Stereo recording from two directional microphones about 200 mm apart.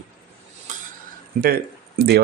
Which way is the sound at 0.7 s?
40° right (ahead or behind).